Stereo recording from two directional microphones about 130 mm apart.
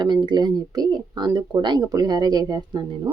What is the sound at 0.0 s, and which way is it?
Speech, 35° right (ahead or behind).